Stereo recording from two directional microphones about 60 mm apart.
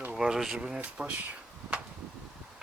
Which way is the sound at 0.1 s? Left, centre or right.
Centre.